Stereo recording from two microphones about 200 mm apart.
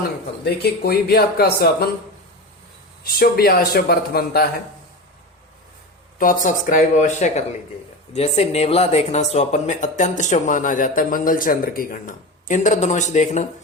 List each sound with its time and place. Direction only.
0.0 s speech: 50° left (ahead or behind)
3.1 s speech: 50° left (ahead or behind)
6.1 s speech: 45° left (ahead or behind)